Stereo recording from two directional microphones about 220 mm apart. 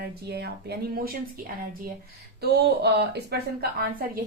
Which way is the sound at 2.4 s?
50° right (ahead or behind).